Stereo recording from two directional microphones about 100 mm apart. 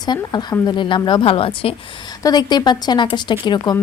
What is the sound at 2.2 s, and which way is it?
Speech, 40° left (ahead or behind).